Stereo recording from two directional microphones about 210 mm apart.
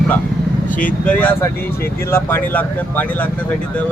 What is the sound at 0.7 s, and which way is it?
Speech, 40° left (ahead or behind).